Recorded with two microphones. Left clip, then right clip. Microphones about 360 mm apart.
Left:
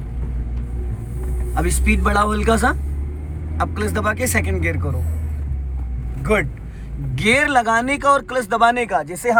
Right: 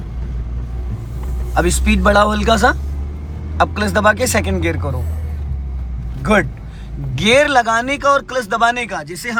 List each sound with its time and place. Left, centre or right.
1.5 s speech: centre
6.3 s speech: centre